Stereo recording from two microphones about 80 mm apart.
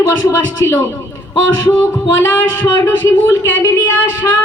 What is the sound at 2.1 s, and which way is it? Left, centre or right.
Speech, left.